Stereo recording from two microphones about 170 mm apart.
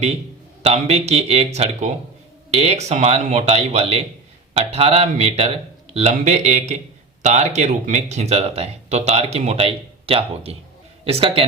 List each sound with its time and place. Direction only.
0.6 s speech: 40° right (ahead or behind)